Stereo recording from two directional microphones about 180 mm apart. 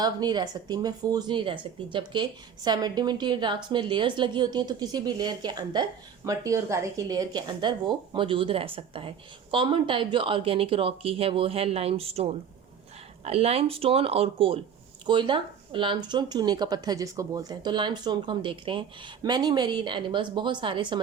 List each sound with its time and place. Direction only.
0.0 s speech: 25° right (ahead or behind)